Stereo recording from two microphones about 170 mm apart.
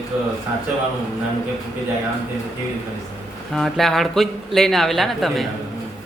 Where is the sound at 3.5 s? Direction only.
Centre (ahead or behind).